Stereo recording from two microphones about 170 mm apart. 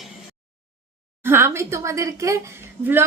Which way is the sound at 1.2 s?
15° right (ahead or behind).